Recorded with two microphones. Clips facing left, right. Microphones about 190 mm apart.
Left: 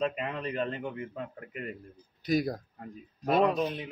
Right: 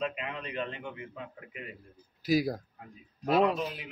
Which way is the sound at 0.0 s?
40° left (ahead or behind).